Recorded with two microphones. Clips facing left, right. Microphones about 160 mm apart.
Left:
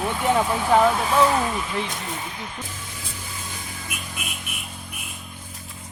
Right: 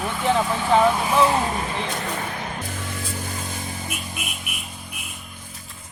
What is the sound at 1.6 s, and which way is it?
Speech, 55° right (ahead or behind).